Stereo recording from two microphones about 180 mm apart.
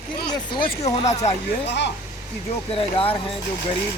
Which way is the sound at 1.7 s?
75° left (ahead or behind).